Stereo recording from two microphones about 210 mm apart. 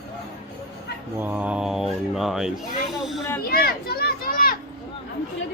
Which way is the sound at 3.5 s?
45° left (ahead or behind).